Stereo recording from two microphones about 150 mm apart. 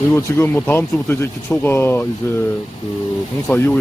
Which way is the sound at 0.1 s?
15° left (ahead or behind).